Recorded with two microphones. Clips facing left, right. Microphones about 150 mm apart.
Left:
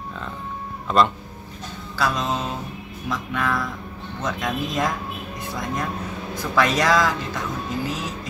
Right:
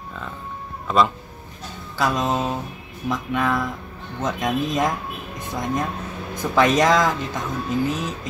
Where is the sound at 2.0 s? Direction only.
20° right (ahead or behind).